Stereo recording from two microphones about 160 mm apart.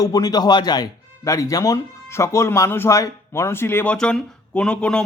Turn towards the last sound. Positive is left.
turn(degrees=5)  # may be behind; listen again after turning